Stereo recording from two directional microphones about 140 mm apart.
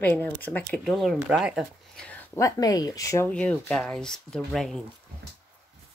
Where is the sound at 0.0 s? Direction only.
10° left (ahead or behind); by 1.7 s 5° right (ahead or behind).